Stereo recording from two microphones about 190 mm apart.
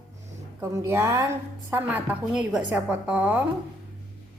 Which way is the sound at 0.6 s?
15° right (ahead or behind).